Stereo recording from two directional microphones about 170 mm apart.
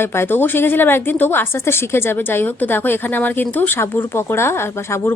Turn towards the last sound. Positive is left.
turn(degrees=15)  # may be behind; listen again after turning